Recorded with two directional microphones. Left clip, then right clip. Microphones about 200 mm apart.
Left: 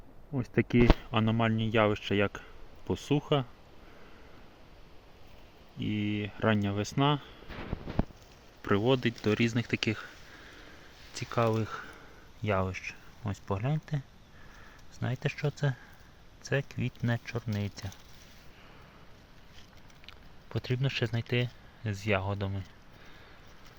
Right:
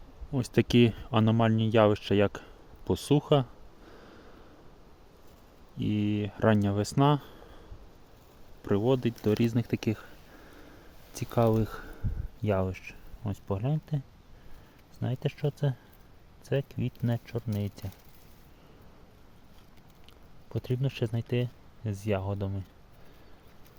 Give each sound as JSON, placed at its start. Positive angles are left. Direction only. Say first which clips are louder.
{"t": 0.3, "sound": "speech", "louder": "right 3 dB", "side_deg": -30}
{"t": 5.8, "sound": "speech", "louder": "right 3 dB", "side_deg": -30}
{"t": 8.6, "sound": "speech", "louder": "even", "side_deg": -15}
{"t": 11.1, "sound": "speech", "louder": "right 3 dB", "side_deg": -40}
{"t": 20.1, "sound": "speech", "louder": "left 3 dB", "side_deg": -20}